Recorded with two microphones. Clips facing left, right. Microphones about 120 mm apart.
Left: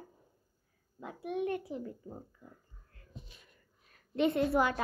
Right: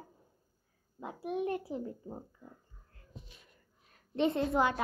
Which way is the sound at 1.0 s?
35° right (ahead or behind).